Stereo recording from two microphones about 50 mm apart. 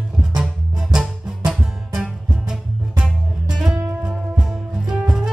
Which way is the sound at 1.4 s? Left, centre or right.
Centre.